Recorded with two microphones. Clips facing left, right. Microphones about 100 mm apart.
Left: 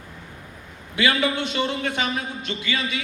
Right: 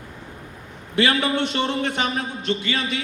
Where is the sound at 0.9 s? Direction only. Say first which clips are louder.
Right 2 dB; 35° right (ahead or behind).